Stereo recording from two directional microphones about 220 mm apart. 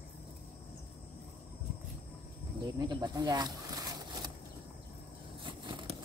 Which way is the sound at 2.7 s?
20° right (ahead or behind).